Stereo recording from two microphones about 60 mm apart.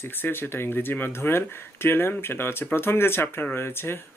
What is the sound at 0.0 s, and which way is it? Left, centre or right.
Speech, left.